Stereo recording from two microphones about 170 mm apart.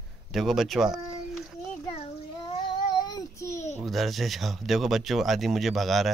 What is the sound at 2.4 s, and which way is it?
Child singing, 25° left (ahead or behind).